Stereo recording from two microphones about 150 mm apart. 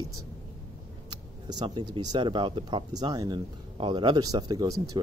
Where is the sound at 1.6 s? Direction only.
30° right (ahead or behind).